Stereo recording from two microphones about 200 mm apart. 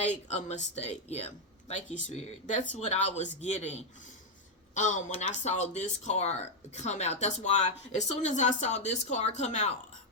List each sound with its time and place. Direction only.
0.0 s speech: 35° left (ahead or behind)